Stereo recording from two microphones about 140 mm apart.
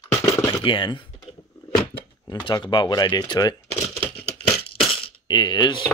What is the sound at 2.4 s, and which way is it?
Speech, 35° left (ahead or behind).